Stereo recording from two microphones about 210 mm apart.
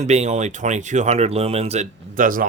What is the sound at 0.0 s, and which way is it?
Speech, 35° right (ahead or behind).